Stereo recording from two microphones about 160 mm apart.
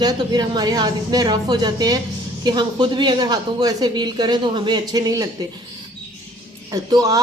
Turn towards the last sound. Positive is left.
turn(degrees=-20)  # may be behind; listen again after turning